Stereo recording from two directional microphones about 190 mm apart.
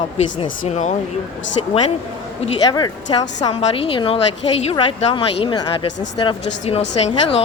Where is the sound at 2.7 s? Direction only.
20° left (ahead or behind).